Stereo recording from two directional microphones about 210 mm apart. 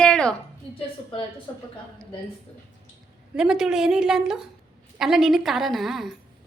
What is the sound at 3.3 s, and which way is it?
A woman's voice, centre (ahead or behind).